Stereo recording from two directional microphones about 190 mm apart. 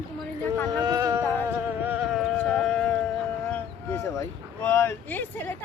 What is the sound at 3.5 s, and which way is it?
Speech, 15° left (ahead or behind).